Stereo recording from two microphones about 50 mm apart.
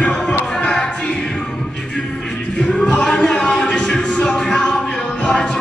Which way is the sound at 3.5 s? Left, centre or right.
Left.